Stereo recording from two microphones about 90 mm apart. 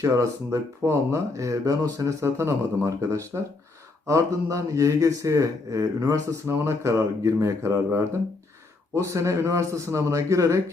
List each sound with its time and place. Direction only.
0.0 s speech: 30° right (ahead or behind)